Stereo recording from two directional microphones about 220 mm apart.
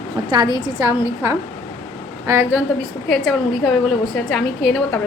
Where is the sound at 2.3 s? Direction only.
10° right (ahead or behind).